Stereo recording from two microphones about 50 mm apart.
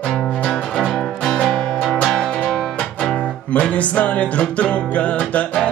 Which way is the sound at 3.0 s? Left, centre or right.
Centre.